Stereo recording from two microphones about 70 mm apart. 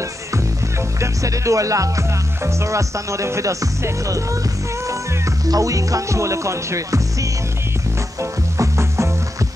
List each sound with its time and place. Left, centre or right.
1.0 s speech: right
5.5 s speech: right
8.2 s music: right